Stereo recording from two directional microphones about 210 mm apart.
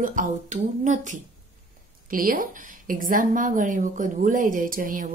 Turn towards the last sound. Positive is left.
turn(degrees=-40)  # may be behind; listen again after turning